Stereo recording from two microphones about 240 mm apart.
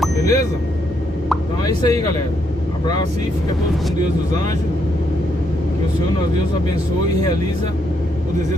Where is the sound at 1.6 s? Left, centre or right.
Centre.